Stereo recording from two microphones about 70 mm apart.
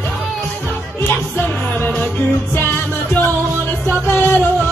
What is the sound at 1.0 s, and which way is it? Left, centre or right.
Music, left.